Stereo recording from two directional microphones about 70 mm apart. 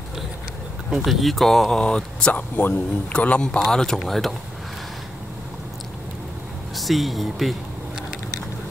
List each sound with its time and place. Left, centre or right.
0.8 s speech: centre
2.3 s speech: left; by 4.4 s centre
6.7 s speech: centre